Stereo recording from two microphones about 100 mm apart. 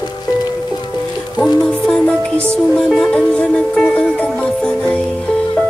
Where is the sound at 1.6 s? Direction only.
10° left (ahead or behind).